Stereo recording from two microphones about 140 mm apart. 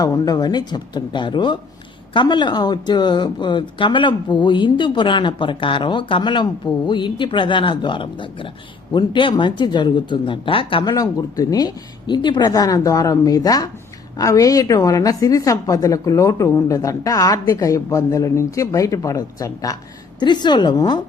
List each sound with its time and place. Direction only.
0.0 s speech: 25° left (ahead or behind)
10.9 s a woman's voice: 25° left (ahead or behind)